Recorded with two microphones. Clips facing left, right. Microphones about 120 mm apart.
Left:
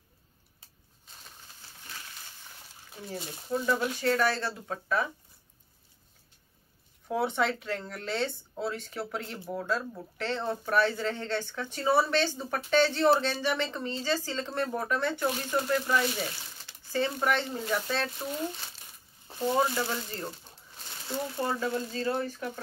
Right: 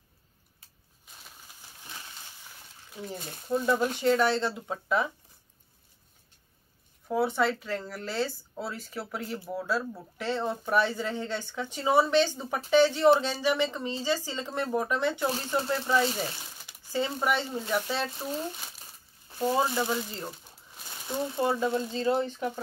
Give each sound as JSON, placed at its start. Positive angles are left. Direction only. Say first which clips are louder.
{"t": 3.5, "sound": "speech", "louder": "right 3 dB", "side_deg": -20}
{"t": 7.1, "sound": "speech", "louder": "right 2 dB", "side_deg": 0}
{"t": 15.2, "sound": "speech", "louder": "even", "side_deg": -30}
{"t": 16.6, "sound": "speech", "louder": "left 1 dB", "side_deg": -15}
{"t": 19.4, "sound": "speech", "louder": "right 1 dB", "side_deg": -15}